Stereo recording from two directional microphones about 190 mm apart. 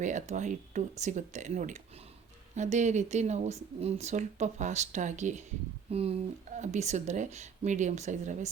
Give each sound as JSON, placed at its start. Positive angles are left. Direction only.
{"t": 0.0, "sound": "speech", "side_deg": -40}